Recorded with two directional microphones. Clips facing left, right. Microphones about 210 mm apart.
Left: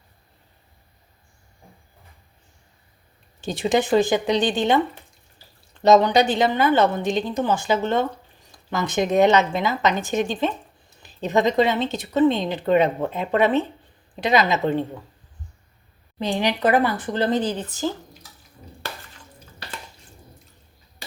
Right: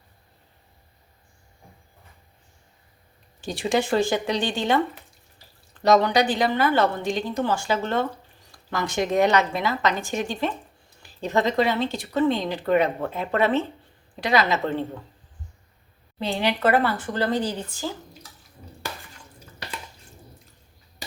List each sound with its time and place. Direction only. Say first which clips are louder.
3.4 s speech: left 3 dB; 20° left (ahead or behind)
5.8 s speech: left 3 dB; 20° left (ahead or behind)
16.1 s speech: left 2 dB; 15° left (ahead or behind)